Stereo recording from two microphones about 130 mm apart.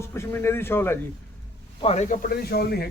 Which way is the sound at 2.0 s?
75° left (ahead or behind).